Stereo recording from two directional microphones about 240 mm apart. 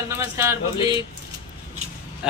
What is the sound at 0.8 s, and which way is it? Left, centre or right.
Speech, left.